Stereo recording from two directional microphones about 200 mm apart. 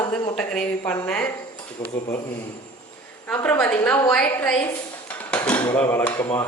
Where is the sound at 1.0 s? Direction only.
5° left (ahead or behind).